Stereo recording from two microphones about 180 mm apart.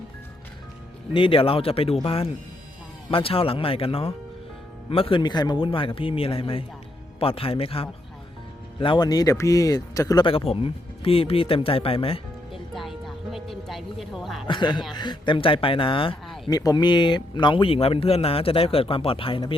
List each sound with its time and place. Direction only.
1.1 s speech: 30° left (ahead or behind)
12.7 s music: centre (ahead or behind)
13.7 s speech: centre (ahead or behind)
14.4 s speech: 25° left (ahead or behind)